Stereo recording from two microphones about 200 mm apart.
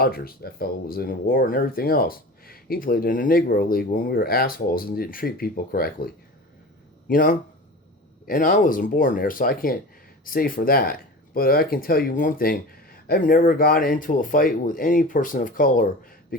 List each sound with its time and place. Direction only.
0.0 s speech: 50° left (ahead or behind)
7.1 s speech: 45° left (ahead or behind)